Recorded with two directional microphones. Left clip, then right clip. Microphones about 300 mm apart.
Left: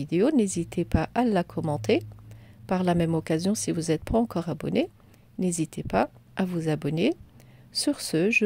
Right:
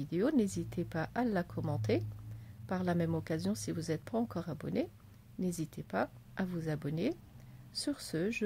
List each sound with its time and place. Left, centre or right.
0.0 s speech: left